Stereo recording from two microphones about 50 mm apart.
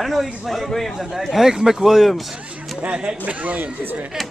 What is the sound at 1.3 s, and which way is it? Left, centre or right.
Speech, centre.